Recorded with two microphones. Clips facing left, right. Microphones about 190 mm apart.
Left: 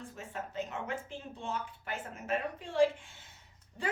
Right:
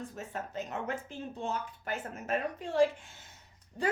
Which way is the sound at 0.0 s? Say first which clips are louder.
Right 3 dB; 40° right (ahead or behind).